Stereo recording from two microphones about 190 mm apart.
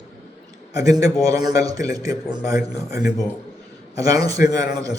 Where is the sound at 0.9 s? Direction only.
15° right (ahead or behind).